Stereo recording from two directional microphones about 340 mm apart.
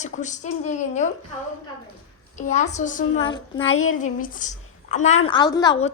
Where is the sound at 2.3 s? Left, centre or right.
Left.